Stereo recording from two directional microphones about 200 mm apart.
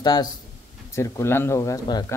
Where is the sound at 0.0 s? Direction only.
20° left (ahead or behind).